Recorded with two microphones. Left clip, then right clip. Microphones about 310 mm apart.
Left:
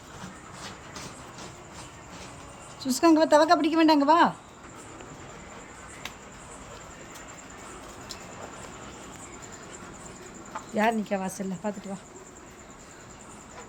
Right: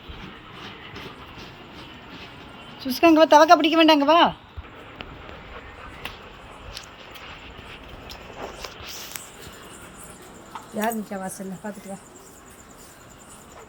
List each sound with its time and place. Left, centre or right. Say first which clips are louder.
2.8 s speech: right 5 dB; centre
10.8 s speech: left 2 dB; centre